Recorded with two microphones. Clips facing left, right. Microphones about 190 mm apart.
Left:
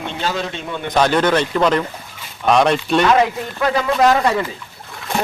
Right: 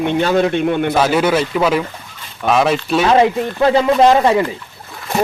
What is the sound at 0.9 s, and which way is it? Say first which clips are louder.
Speech: left 4 dB; 5° right (ahead or behind).